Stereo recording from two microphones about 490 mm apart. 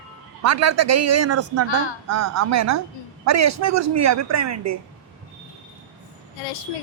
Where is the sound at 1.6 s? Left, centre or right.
Left.